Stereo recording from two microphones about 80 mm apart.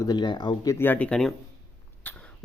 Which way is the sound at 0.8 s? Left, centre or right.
Left.